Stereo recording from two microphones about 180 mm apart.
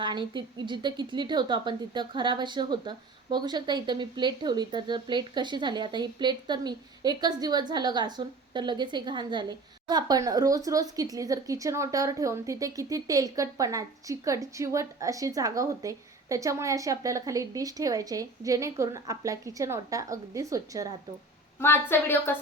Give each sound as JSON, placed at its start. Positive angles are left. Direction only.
{"t": 0.0, "sound": "a woman's voice", "side_deg": -25}
{"t": 21.6, "sound": "a woman's voice", "side_deg": 15}